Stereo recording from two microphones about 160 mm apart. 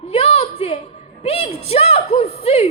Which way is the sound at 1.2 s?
40° left (ahead or behind).